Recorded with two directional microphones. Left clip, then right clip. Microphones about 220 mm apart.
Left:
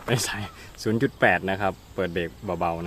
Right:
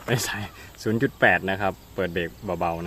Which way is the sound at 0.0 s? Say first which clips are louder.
Even; centre (ahead or behind).